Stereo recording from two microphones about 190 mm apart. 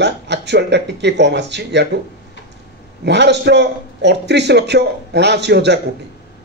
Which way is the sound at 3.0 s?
65° right (ahead or behind).